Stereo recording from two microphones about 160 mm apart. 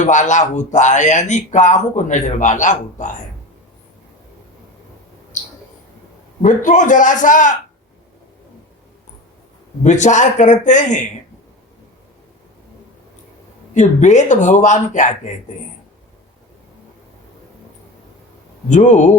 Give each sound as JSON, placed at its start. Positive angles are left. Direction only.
{"t": 0.0, "sound": "speech", "side_deg": 50}
{"t": 6.4, "sound": "speech", "side_deg": 50}
{"t": 9.8, "sound": "speech", "side_deg": 50}
{"t": 13.7, "sound": "speech", "side_deg": 50}
{"t": 18.7, "sound": "speech", "side_deg": 50}